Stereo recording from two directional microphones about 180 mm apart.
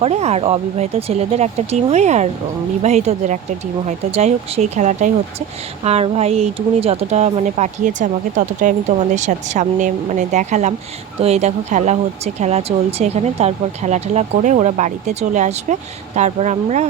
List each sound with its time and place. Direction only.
0.0 s speech: 35° right (ahead or behind)